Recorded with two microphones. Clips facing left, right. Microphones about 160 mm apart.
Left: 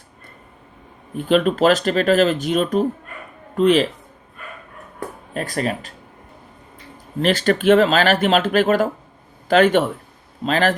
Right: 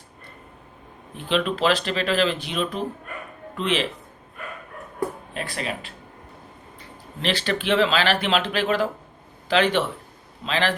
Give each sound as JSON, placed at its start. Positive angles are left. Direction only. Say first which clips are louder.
{"t": 1.1, "sound": "speech", "louder": "left 7 dB", "side_deg": 45}
{"t": 5.3, "sound": "speech", "louder": "left 7 dB", "side_deg": 45}
{"t": 7.2, "sound": "speech", "louder": "left 7 dB", "side_deg": 45}